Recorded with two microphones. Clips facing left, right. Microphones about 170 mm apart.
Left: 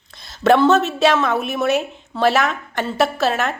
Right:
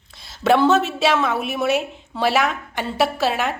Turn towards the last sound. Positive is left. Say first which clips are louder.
# left 1 dB
turn(degrees=-10)  # may be behind; listen again after turning